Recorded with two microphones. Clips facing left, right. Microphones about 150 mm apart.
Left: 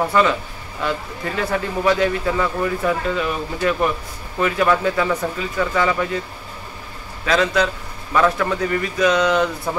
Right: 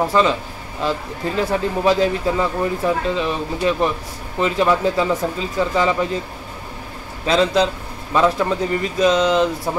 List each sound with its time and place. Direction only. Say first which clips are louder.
0.1 s a man's voice: right 1 dB; 25° right (ahead or behind)
7.2 s a man's voice: right 2 dB; 25° right (ahead or behind)